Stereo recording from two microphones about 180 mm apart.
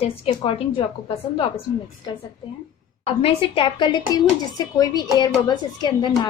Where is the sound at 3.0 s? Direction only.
30° left (ahead or behind).